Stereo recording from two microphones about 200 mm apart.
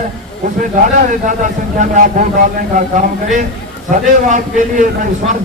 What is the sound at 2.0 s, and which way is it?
A man's voice, 40° right (ahead or behind).